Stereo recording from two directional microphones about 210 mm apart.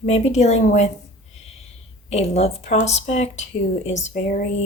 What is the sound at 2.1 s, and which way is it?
Speech, 30° left (ahead or behind).